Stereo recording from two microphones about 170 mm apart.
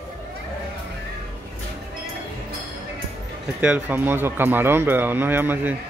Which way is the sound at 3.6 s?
10° right (ahead or behind).